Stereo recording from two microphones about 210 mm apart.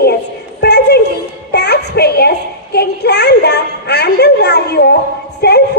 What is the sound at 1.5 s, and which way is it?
Child singing, 50° left (ahead or behind).